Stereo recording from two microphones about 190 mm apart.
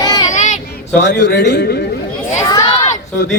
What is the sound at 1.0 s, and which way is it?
Speech, 65° left (ahead or behind).